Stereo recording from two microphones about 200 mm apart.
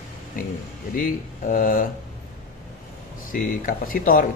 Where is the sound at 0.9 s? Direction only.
45° left (ahead or behind).